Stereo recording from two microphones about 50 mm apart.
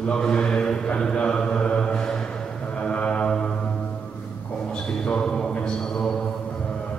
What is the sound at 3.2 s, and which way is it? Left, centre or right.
Music, centre.